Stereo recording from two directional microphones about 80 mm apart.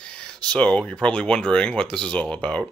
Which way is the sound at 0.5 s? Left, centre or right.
Centre.